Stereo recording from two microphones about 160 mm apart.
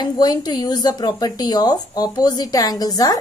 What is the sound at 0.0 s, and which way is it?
Speech, 25° left (ahead or behind).